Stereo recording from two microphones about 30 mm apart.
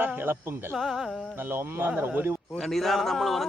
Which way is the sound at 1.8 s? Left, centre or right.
Right.